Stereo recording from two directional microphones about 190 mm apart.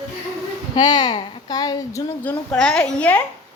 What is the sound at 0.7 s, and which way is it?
Speech, 20° left (ahead or behind).